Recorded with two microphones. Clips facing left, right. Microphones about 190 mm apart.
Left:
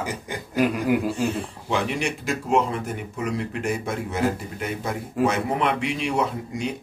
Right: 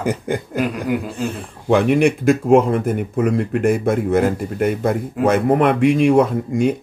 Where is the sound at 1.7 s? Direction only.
55° right (ahead or behind).